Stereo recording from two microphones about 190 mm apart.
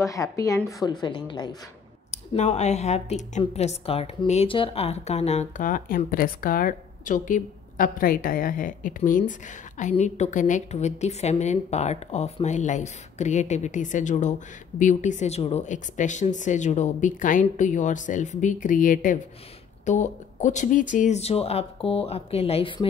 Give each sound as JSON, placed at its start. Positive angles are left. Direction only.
{"t": 0.0, "sound": "speech", "side_deg": 15}
{"t": 2.0, "sound": "a woman's voice", "side_deg": 35}